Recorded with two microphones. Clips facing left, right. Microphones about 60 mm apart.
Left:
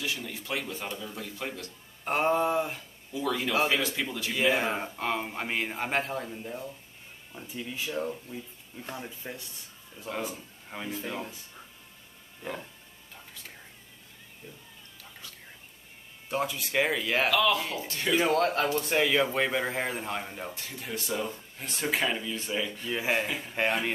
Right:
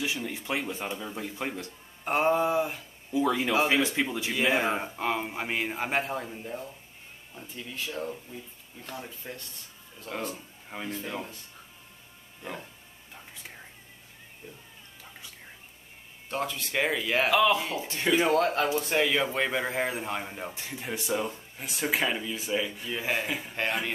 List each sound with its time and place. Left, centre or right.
0.0 s speech: centre
2.0 s a man's voice: centre
3.1 s speech: right
4.3 s a man's voice: centre
12.4 s speech: centre
16.3 s a man's voice: centre
17.3 s speech: centre
18.1 s a man's voice: centre
20.5 s speech: right
22.9 s speech: centre
23.2 s a man's voice: centre
23.5 s a man's voice: centre